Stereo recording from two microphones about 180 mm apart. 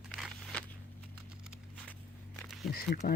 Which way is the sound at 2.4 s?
Centre (ahead or behind).